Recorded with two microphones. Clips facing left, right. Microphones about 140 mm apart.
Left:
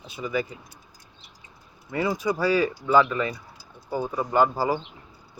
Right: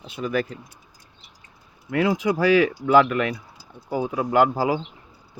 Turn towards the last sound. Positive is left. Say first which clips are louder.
# right 2 dB
turn(degrees=-90)